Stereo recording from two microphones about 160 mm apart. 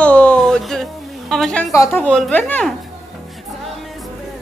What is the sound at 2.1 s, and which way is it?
Speech, 5° left (ahead or behind).